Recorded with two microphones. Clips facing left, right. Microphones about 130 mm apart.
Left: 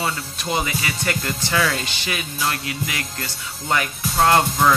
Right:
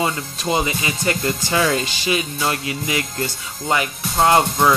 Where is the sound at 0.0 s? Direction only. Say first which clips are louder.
Right 4 dB; 20° right (ahead or behind).